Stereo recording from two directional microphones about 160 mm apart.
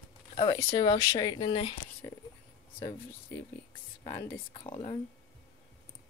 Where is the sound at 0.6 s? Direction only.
25° left (ahead or behind).